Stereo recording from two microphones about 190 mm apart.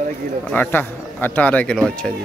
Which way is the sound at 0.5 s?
10° left (ahead or behind).